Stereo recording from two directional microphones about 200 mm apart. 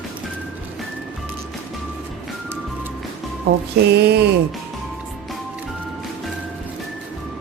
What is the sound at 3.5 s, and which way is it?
Music, 50° right (ahead or behind).